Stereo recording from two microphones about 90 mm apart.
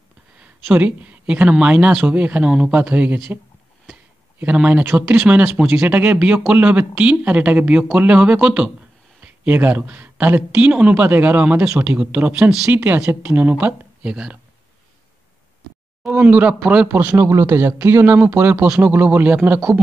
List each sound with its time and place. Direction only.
0.7 s speech: 15° right (ahead or behind)
4.4 s speech: 15° right (ahead or behind)
16.0 s speech: 20° right (ahead or behind)
17.2 s a man's voice: 30° right (ahead or behind)